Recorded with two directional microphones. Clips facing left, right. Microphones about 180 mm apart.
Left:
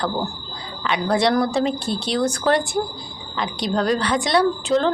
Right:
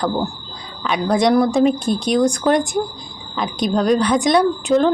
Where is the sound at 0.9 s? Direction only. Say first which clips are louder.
Right 3 dB; 15° right (ahead or behind).